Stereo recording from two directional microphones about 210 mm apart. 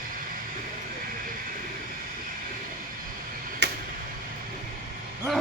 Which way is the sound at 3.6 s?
55° right (ahead or behind).